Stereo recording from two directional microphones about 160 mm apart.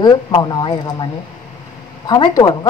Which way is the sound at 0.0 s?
25° left (ahead or behind).